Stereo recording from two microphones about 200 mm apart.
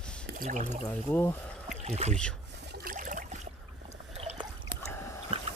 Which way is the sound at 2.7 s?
45° right (ahead or behind).